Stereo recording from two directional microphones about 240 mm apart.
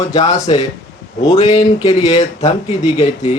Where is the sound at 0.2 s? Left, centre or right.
Left.